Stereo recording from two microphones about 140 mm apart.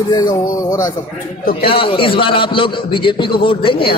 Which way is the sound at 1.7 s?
40° left (ahead or behind).